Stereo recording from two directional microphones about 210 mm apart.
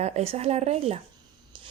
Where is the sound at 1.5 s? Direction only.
25° right (ahead or behind).